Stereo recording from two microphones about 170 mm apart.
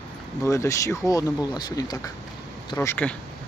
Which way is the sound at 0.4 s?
15° left (ahead or behind).